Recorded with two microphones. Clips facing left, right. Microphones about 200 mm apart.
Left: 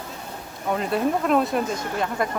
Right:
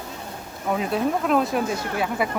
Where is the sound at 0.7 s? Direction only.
Centre (ahead or behind).